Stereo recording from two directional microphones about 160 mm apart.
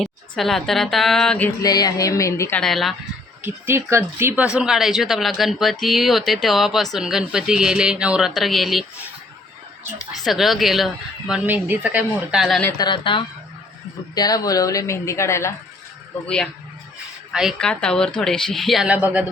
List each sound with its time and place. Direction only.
0.0 s speech: centre (ahead or behind)
1.6 s a woman's voice: 25° left (ahead or behind)
2.6 s speech: centre (ahead or behind)
3.4 s speech: 15° right (ahead or behind)
12.7 s a woman's voice: 25° left (ahead or behind)
16.2 s speech: 5° left (ahead or behind)